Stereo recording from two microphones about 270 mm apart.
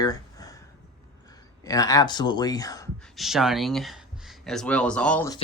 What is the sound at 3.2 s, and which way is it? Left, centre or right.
Speech, centre.